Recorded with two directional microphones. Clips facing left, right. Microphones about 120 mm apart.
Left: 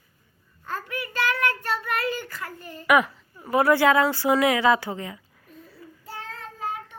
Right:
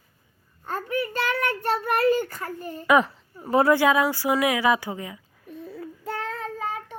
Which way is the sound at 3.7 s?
15° right (ahead or behind).